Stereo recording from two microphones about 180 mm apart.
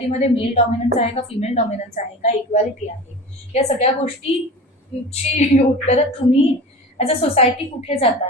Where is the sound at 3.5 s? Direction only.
35° left (ahead or behind).